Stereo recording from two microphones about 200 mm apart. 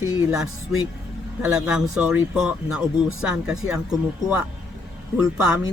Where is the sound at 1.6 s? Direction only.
5° right (ahead or behind).